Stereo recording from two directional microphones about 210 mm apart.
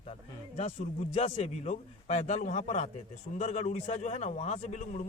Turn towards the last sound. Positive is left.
turn(degrees=35)  # may be behind; listen again after turning